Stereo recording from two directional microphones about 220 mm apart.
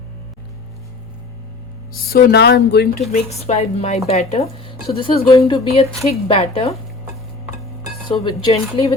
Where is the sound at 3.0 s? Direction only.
30° left (ahead or behind).